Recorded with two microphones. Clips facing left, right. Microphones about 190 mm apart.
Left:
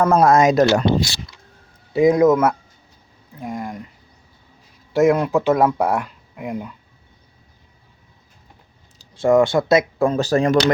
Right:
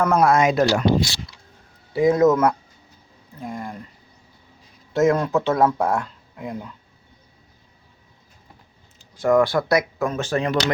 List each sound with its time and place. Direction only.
0.0 s speech: 30° left (ahead or behind)
1.9 s speech: 20° left (ahead or behind)
4.9 s speech: 10° left (ahead or behind)
9.1 s speech: 25° left (ahead or behind); by 10.7 s 45° left (ahead or behind)